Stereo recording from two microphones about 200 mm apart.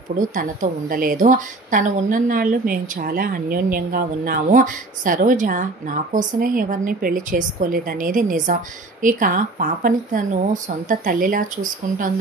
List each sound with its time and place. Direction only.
0.2 s a woman's voice: 40° right (ahead or behind)